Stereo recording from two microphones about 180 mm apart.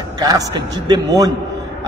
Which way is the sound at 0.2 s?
20° right (ahead or behind).